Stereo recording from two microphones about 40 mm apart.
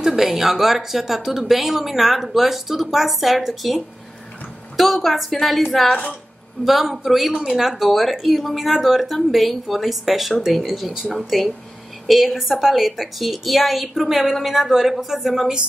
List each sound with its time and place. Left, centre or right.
0.0 s a woman's voice: centre